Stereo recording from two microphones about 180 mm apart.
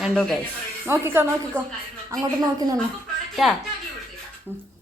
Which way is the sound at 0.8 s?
15° right (ahead or behind).